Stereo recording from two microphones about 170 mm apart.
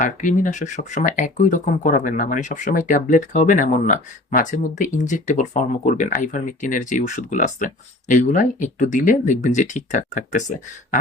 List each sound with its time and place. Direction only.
0.0 s speech: 50° left (ahead or behind)